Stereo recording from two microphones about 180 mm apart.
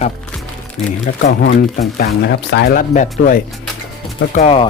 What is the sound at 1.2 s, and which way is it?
Speech, 70° left (ahead or behind).